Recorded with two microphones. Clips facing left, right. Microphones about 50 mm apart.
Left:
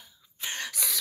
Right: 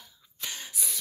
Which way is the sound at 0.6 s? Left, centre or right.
Left.